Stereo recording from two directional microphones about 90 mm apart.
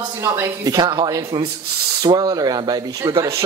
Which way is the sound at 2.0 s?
45° right (ahead or behind).